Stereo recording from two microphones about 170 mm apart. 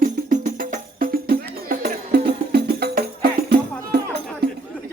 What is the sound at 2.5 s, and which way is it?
Music, 70° right (ahead or behind).